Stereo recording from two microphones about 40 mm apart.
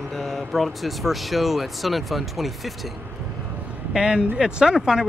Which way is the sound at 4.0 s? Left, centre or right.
Centre.